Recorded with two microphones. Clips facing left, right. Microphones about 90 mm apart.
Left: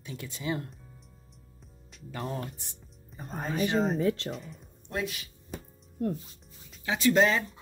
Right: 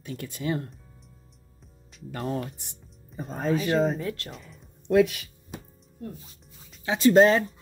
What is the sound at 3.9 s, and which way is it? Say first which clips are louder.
Speech: left 5 dB; 25° left (ahead or behind).